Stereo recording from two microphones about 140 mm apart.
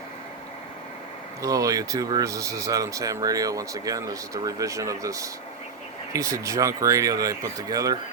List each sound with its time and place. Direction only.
1.4 s speech: 25° right (ahead or behind)